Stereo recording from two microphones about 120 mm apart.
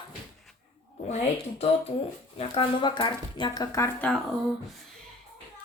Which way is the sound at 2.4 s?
45° left (ahead or behind).